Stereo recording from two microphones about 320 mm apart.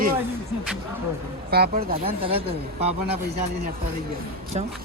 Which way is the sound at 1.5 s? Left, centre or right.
Right.